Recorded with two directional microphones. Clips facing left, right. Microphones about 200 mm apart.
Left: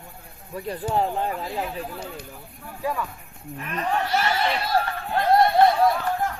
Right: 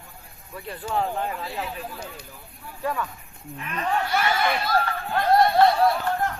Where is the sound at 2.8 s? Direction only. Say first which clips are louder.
Even; 5° left (ahead or behind).